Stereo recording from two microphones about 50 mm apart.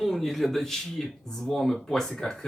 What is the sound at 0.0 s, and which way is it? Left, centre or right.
Speech, centre.